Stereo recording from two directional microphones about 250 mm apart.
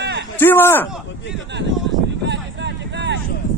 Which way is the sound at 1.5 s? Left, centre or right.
Right.